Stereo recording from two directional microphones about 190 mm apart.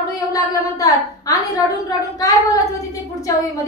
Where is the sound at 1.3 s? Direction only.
20° left (ahead or behind).